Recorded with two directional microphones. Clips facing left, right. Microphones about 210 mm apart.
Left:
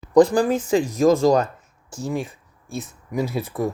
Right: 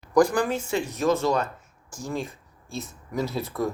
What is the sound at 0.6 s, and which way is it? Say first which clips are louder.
Speech: left 7 dB; 90° left.